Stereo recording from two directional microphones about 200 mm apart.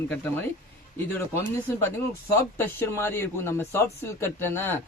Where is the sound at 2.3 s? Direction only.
15° left (ahead or behind).